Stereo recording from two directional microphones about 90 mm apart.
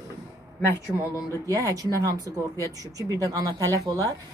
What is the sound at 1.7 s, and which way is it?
A woman's voice, 40° right (ahead or behind).